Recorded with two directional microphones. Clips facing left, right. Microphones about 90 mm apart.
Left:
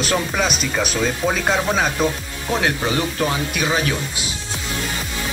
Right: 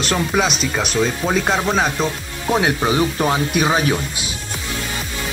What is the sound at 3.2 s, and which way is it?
Speech, 25° right (ahead or behind).